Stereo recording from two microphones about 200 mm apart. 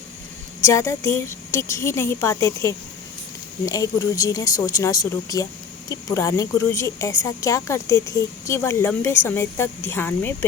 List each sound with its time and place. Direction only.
0.6 s a woman's voice: 15° left (ahead or behind)